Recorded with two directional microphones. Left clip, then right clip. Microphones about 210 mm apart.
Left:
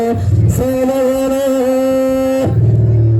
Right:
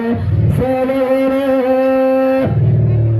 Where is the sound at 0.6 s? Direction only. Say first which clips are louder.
Left 1 dB; 70° left (ahead or behind).